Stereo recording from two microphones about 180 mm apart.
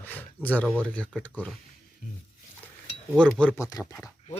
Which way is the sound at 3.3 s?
5° left (ahead or behind).